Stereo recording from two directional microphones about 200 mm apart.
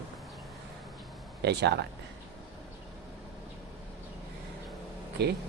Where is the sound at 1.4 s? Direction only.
55° right (ahead or behind).